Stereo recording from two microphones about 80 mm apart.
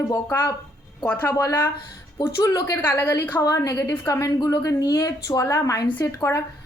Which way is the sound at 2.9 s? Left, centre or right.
Left.